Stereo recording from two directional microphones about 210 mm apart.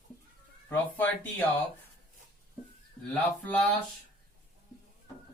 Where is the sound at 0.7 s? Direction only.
10° left (ahead or behind).